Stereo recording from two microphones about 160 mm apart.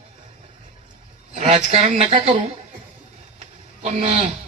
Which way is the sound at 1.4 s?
45° right (ahead or behind).